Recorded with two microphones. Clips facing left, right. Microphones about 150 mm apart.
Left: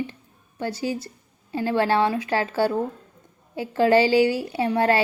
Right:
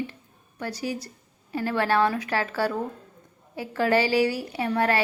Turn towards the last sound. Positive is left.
turn(degrees=30)  # may be behind; listen again after turning